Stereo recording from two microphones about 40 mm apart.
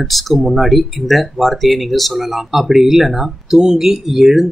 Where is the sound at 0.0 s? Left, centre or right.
Centre.